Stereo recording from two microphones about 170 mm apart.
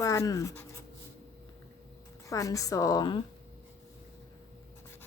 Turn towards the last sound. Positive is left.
turn(degrees=25)  # may be behind; listen again after turning